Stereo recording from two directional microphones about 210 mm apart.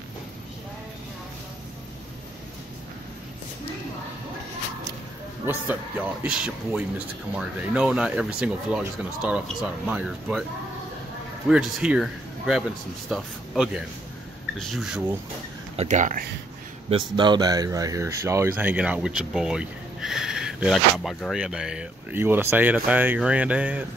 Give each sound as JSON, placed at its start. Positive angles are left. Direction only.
{"t": 5.5, "sound": "a man's voice", "side_deg": -10}
{"t": 11.4, "sound": "speech", "side_deg": -5}
{"t": 15.7, "sound": "speech", "side_deg": -30}
{"t": 16.9, "sound": "speech", "side_deg": -20}